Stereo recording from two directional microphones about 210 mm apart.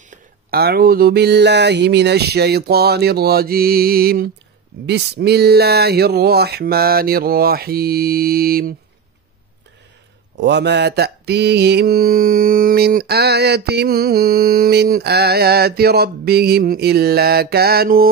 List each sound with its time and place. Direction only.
0.1 s mantra: 45° right (ahead or behind)
10.3 s mantra: 55° right (ahead or behind)